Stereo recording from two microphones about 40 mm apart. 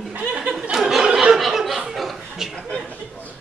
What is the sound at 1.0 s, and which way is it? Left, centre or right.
Snicker, centre.